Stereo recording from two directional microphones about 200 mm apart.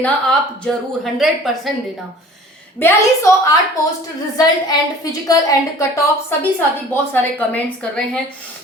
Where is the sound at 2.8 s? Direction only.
10° left (ahead or behind).